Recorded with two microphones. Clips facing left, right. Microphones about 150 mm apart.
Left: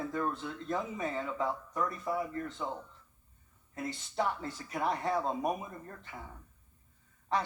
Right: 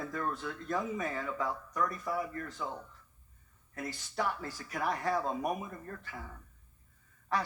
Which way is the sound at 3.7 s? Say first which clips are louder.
Left 2 dB; 20° left (ahead or behind).